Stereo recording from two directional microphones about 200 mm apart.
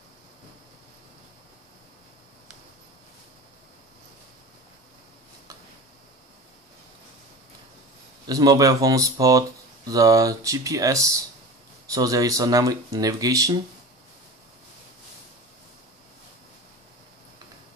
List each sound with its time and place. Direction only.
8.3 s speech: 20° right (ahead or behind)